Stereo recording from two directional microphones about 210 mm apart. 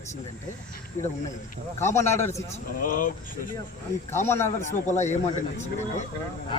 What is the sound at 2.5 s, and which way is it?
Speech, 40° left (ahead or behind).